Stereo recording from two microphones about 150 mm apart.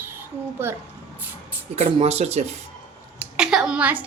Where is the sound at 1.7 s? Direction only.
45° right (ahead or behind).